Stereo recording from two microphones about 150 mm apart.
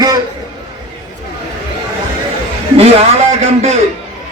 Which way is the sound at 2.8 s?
40° right (ahead or behind).